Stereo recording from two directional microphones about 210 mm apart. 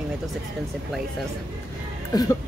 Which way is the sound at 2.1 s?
15° left (ahead or behind).